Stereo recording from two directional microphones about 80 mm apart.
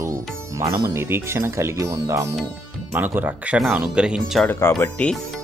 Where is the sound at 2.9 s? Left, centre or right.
Right.